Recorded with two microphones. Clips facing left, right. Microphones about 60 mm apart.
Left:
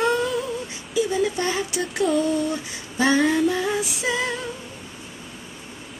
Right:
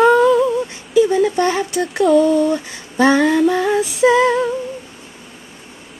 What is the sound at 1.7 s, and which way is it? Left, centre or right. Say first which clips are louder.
Female singing: right 9 dB; centre.